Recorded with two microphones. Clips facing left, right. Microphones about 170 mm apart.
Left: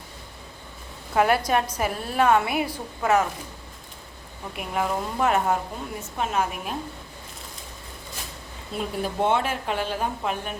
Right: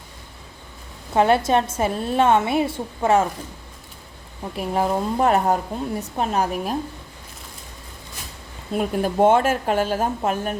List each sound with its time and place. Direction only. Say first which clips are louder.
1.1 s a woman's voice: right 4 dB; 25° right (ahead or behind)
4.5 s speech: right 5 dB; 35° right (ahead or behind)
8.8 s speech: right 7 dB; 45° right (ahead or behind)